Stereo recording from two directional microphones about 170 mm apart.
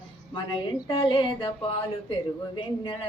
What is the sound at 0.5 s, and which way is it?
Speech, 30° left (ahead or behind).